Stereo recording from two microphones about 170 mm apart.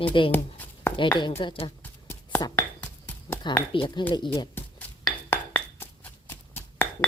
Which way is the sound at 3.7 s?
30° left (ahead or behind).